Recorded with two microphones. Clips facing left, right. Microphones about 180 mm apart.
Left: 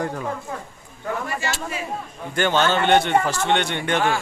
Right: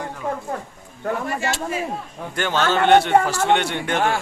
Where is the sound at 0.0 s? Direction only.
45° left (ahead or behind).